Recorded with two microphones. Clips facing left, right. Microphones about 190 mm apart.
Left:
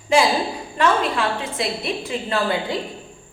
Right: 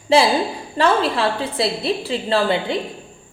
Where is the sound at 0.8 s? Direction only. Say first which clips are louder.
Right 2 dB; 30° right (ahead or behind).